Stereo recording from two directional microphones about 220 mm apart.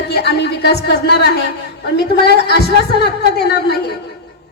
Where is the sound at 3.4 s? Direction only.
45° left (ahead or behind).